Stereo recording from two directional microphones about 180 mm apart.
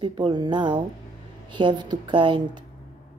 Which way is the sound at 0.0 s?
25° right (ahead or behind).